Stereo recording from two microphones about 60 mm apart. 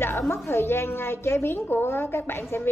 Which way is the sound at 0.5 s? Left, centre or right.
Left.